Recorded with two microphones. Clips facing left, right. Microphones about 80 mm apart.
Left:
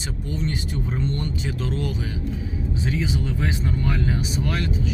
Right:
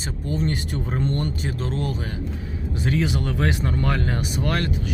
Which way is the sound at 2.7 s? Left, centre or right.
Right.